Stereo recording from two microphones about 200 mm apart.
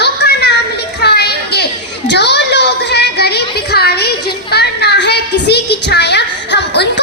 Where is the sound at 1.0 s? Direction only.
55° left (ahead or behind).